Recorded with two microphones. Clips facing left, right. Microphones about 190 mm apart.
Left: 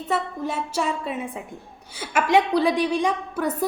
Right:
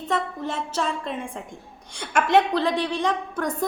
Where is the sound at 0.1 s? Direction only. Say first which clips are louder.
Left 1 dB; 10° left (ahead or behind).